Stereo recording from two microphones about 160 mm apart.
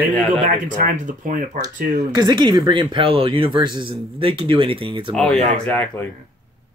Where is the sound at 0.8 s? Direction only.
55° right (ahead or behind).